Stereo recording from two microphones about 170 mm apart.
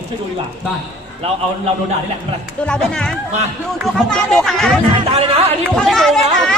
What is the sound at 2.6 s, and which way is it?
Speech, 5° left (ahead or behind).